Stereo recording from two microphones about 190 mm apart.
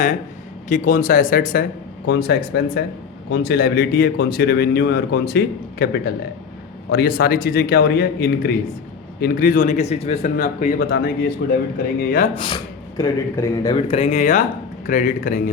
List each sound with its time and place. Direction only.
0.7 s speech: 45° left (ahead or behind)
2.0 s a man's voice: 60° left (ahead or behind)
10.8 s a man's voice: 60° left (ahead or behind)
11.9 s speech: 50° left (ahead or behind)
12.3 s speech: 25° left (ahead or behind)
13.7 s speech: 30° left (ahead or behind); by 15.4 s 45° left (ahead or behind)